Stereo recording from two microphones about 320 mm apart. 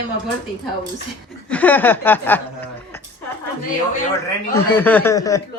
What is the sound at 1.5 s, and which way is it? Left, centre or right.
Speech, centre.